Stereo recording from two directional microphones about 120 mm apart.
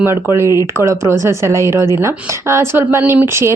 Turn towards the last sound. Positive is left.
turn(degrees=-20)  # may be behind; listen again after turning